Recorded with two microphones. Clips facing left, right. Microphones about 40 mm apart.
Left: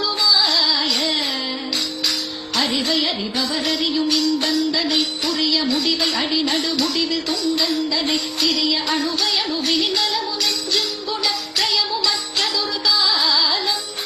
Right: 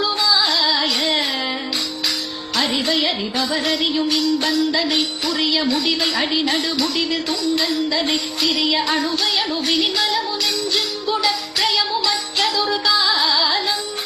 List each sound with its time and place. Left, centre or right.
0.4 s music: centre
0.7 s carnatic music: right
4.0 s speech: centre
5.4 s music: right
5.6 s speech: centre
8.6 s music: right
9.6 s music: centre
11.6 s music: centre
13.1 s music: centre